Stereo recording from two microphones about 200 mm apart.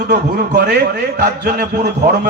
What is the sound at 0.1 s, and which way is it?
A man's voice, 55° right (ahead or behind).